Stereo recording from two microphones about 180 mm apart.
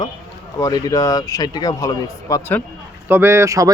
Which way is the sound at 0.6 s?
20° left (ahead or behind).